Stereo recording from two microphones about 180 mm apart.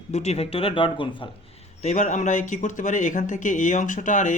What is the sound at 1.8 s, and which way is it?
Speech, 40° left (ahead or behind).